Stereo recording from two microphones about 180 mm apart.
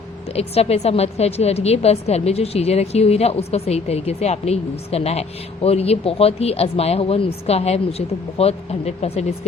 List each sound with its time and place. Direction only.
0.3 s a woman's voice: 35° left (ahead or behind)